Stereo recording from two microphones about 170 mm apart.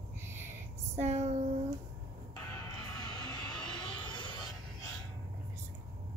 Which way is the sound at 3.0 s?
25° left (ahead or behind).